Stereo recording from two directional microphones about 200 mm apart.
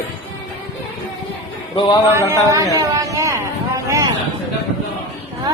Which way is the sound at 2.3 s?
15° right (ahead or behind).